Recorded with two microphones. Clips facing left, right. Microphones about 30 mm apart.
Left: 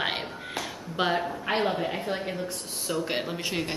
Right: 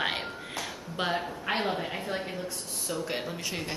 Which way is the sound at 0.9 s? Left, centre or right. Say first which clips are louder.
Left 4 dB; centre.